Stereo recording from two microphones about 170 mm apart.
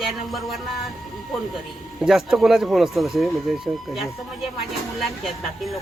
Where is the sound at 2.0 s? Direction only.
Centre (ahead or behind).